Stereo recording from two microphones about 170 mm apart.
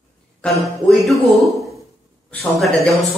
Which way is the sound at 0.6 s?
Centre (ahead or behind).